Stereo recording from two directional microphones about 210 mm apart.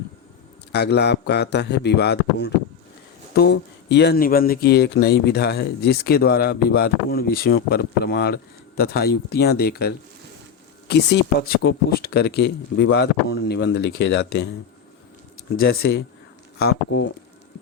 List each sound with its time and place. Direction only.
0.7 s speech: 50° left (ahead or behind)
15.5 s speech: 45° left (ahead or behind)